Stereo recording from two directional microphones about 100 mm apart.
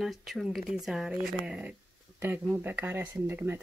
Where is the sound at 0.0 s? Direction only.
Centre (ahead or behind).